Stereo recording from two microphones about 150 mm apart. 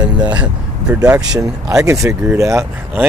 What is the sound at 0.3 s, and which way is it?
Speech, 10° right (ahead or behind).